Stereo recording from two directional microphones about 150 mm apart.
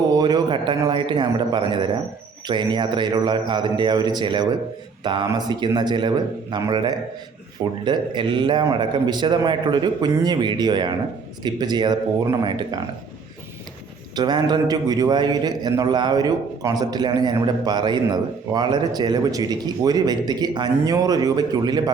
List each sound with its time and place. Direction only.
0.2 s a man's voice: 30° right (ahead or behind)
14.2 s a man's voice: 30° right (ahead or behind)